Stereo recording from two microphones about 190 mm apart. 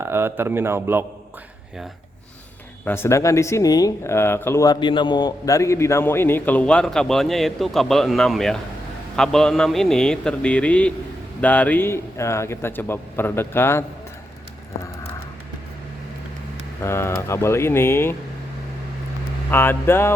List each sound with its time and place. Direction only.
0.0 s a man's voice: 10° right (ahead or behind)
2.8 s a man's voice: 10° left (ahead or behind)
16.8 s speech: 15° left (ahead or behind)
19.5 s speech: 10° left (ahead or behind)